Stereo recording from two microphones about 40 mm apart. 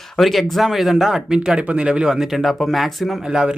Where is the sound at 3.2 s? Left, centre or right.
Centre.